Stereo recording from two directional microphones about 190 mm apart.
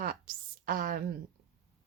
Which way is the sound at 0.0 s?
50° right (ahead or behind).